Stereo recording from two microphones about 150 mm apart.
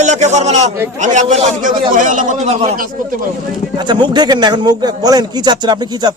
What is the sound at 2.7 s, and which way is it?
Speech, 65° right (ahead or behind).